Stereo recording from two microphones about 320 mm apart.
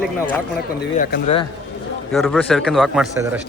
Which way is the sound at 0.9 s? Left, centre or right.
Left.